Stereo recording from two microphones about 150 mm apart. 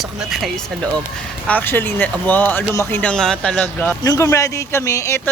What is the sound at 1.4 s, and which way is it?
Speech, 10° left (ahead or behind).